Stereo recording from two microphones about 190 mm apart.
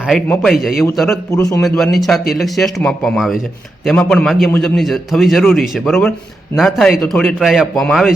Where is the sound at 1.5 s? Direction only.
Centre (ahead or behind).